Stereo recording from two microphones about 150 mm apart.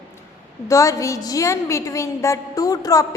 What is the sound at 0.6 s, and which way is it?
A woman's voice, 20° left (ahead or behind).